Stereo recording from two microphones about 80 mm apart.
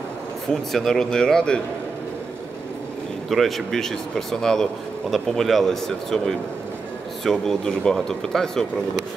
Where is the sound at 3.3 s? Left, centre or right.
Centre.